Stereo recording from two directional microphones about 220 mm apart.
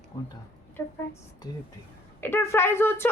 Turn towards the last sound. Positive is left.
turn(degrees=10)  # may be behind; listen again after turning